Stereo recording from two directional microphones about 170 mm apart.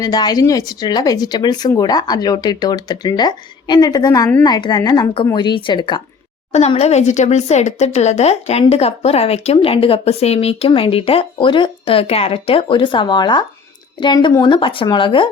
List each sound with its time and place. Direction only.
0.0 s speech: 25° left (ahead or behind)
6.5 s speech: 40° left (ahead or behind)